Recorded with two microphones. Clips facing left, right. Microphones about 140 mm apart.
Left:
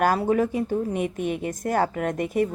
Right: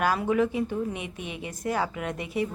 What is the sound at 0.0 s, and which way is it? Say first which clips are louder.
Speech: left 3 dB; 40° left (ahead or behind).